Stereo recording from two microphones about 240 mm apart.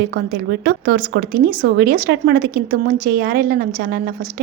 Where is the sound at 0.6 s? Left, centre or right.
Right.